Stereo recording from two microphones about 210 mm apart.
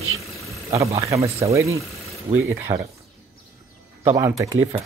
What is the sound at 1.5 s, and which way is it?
Speech, 15° right (ahead or behind).